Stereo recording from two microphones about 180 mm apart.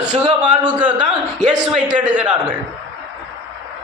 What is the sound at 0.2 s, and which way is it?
Speech, 25° right (ahead or behind).